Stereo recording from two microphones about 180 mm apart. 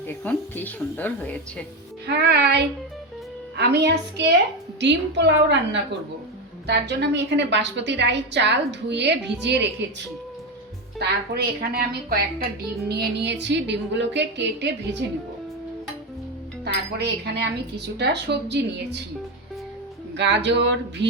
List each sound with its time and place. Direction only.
0.1 s a woman's voice: 10° left (ahead or behind)
2.0 s a woman's voice: 70° right (ahead or behind)
11.3 s a woman's voice: 60° right (ahead or behind); by 15.2 s 75° right (ahead or behind)
16.6 s a woman's voice: 65° right (ahead or behind)
20.1 s a woman's voice: 70° right (ahead or behind)